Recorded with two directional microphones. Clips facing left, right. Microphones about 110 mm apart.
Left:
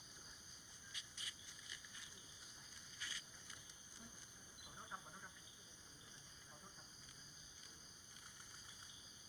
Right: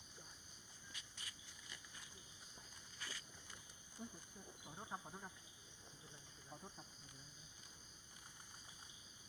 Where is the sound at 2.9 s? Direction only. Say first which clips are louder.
Right 2 dB; 45° right (ahead or behind).